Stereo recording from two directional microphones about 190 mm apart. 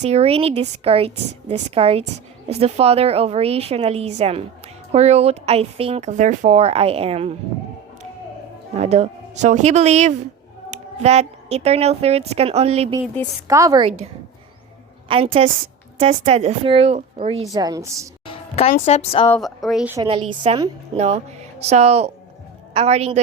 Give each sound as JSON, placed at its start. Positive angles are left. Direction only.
{"t": 0.0, "sound": "speech", "side_deg": -35}
{"t": 8.7, "sound": "a woman's voice", "side_deg": -35}
{"t": 13.5, "sound": "a woman's voice", "side_deg": -20}
{"t": 15.0, "sound": "a woman's voice", "side_deg": -30}
{"t": 17.5, "sound": "a woman's voice", "side_deg": -20}
{"t": 18.3, "sound": "music", "side_deg": 30}
{"t": 18.7, "sound": "a woman's voice", "side_deg": 35}
{"t": 19.3, "sound": "a woman's voice", "side_deg": 0}
{"t": 20.0, "sound": "speech", "side_deg": -25}